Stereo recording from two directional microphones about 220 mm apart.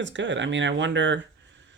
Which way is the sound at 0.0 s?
55° right (ahead or behind).